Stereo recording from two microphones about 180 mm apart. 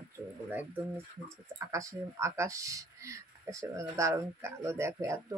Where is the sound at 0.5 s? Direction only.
10° right (ahead or behind).